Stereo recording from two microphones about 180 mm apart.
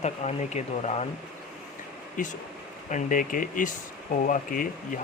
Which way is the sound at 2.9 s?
45° left (ahead or behind).